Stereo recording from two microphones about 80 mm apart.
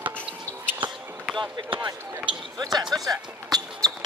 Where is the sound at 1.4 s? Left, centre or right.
Right.